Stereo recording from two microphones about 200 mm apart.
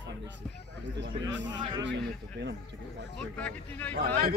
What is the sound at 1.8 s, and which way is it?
Speech, 60° right (ahead or behind).